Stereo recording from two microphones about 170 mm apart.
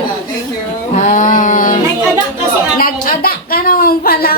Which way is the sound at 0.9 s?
45° left (ahead or behind).